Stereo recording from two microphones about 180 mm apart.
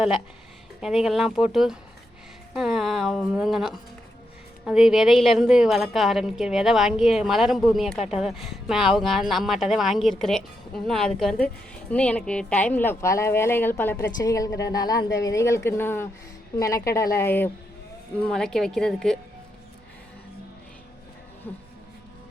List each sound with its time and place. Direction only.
0.8 s a woman's voice: centre (ahead or behind)